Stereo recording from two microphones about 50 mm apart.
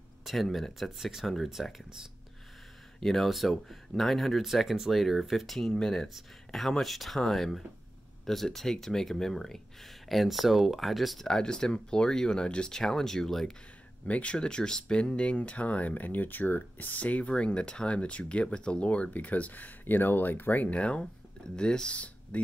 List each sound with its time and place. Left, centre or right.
0.2 s speech: centre
3.0 s speech: centre
6.0 s speech: centre
11.2 s speech: centre
14.0 s speech: left